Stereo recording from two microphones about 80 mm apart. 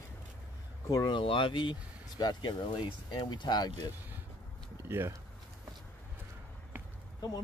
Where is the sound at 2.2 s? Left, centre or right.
Left.